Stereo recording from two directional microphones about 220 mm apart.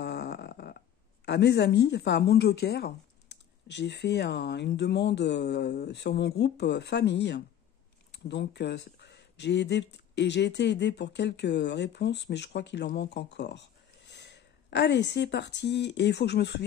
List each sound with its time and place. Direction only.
0.0 s speech: 50° left (ahead or behind)